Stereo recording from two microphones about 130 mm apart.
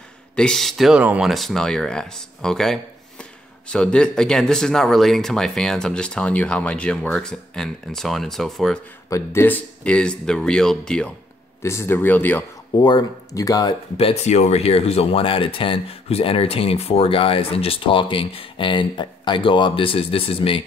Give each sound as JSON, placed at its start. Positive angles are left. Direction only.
{"t": 0.4, "sound": "speech", "side_deg": 5}
{"t": 9.1, "sound": "speech", "side_deg": 20}
{"t": 11.6, "sound": "speech", "side_deg": 20}
{"t": 12.7, "sound": "speech", "side_deg": 30}
{"t": 13.9, "sound": "speech", "side_deg": 50}